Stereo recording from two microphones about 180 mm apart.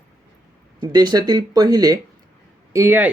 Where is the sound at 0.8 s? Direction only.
20° right (ahead or behind).